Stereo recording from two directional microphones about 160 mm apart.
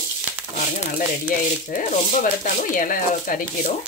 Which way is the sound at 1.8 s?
55° left (ahead or behind).